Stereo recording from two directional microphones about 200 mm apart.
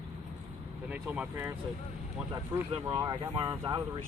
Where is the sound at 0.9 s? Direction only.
5° right (ahead or behind).